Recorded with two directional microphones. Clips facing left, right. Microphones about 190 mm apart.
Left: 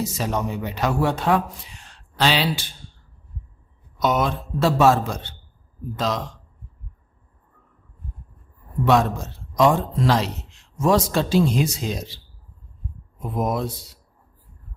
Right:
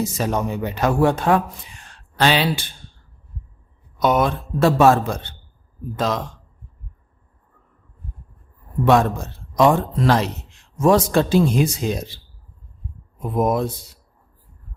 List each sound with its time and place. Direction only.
0.0 s speech: 50° right (ahead or behind)
4.0 s a man's voice: 55° right (ahead or behind)
8.8 s a man's voice: 55° right (ahead or behind)
13.3 s speech: 50° right (ahead or behind)